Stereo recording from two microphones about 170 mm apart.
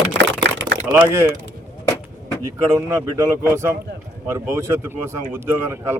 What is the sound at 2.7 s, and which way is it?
Speech, 15° right (ahead or behind).